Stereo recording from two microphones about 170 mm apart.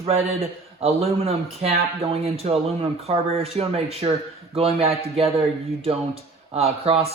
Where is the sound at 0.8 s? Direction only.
35° right (ahead or behind).